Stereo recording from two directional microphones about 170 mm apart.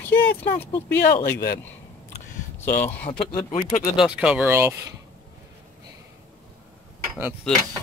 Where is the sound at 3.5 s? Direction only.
45° left (ahead or behind).